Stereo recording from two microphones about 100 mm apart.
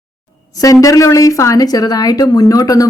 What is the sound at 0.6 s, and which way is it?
A woman's voice, 35° left (ahead or behind).